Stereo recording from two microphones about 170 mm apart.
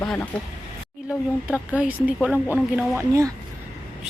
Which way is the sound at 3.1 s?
20° right (ahead or behind).